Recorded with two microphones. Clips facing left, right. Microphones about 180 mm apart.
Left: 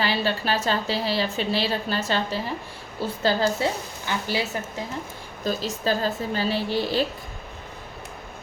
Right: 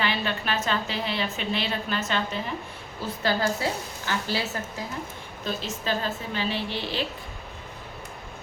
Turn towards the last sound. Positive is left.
turn(degrees=40)  # may be behind; listen again after turning